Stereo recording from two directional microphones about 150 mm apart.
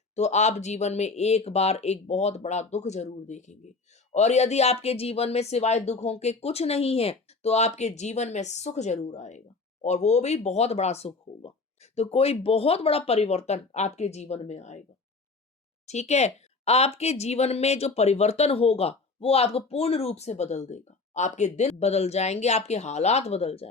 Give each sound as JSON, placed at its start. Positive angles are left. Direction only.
{"t": 0.2, "sound": "speech", "side_deg": 50}
{"t": 15.9, "sound": "speech", "side_deg": 50}